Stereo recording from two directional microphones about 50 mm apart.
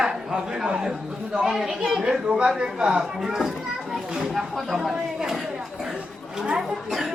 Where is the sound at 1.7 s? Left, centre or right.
Centre.